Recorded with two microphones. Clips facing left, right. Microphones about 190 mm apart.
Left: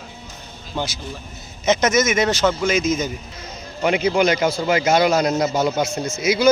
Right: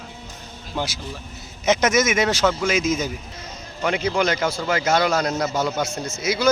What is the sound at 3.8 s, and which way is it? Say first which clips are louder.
A man's voice: left 4 dB; 15° left (ahead or behind).